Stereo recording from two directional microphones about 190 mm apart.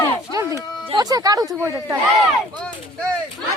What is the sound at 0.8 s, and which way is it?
Speech, 20° right (ahead or behind).